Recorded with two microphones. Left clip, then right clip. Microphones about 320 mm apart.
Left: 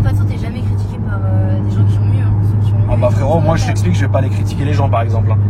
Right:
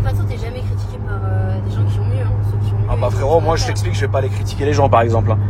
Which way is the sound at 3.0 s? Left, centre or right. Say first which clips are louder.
Even; centre.